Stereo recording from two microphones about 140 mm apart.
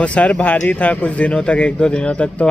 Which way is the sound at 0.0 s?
10° left (ahead or behind).